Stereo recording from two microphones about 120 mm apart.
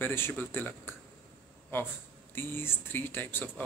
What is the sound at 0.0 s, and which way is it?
Speech, 20° left (ahead or behind).